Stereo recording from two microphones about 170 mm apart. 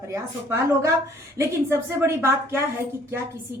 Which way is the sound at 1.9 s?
15° right (ahead or behind).